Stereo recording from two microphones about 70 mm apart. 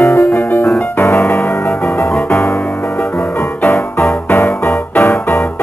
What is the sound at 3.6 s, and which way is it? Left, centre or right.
Music, left.